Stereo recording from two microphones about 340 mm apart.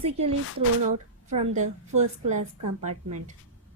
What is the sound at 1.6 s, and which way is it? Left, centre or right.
A woman's voice, right.